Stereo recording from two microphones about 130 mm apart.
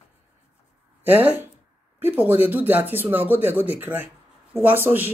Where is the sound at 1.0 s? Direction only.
15° right (ahead or behind).